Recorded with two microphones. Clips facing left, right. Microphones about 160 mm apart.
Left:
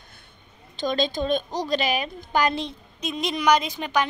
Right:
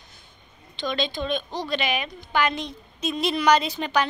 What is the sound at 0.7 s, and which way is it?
A woman's voice, 45° left (ahead or behind).